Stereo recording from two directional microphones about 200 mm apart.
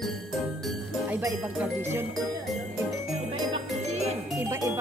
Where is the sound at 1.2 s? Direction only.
10° right (ahead or behind).